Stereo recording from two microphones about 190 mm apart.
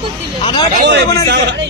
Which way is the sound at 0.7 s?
60° right (ahead or behind).